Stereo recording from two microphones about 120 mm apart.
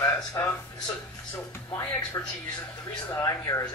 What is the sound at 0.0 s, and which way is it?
Speech, 30° left (ahead or behind).